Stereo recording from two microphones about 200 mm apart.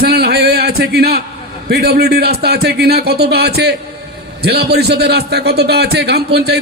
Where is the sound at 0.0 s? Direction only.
50° right (ahead or behind).